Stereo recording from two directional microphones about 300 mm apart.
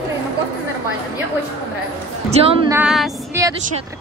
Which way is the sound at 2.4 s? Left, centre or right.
Centre.